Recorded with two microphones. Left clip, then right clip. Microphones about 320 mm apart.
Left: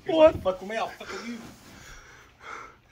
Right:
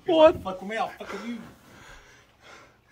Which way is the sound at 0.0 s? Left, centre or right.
Right.